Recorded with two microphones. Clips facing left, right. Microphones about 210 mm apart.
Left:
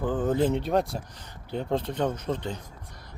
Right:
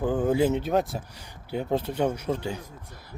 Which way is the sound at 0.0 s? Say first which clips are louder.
Right 2 dB; 10° right (ahead or behind).